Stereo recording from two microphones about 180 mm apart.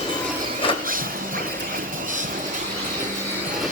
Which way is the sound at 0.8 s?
50° right (ahead or behind).